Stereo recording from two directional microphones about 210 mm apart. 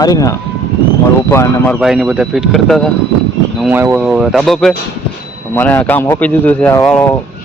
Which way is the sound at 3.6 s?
10° right (ahead or behind).